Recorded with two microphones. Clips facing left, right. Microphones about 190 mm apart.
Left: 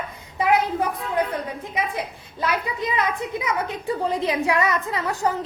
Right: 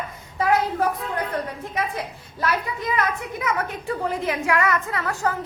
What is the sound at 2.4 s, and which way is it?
A woman's voice, 15° left (ahead or behind).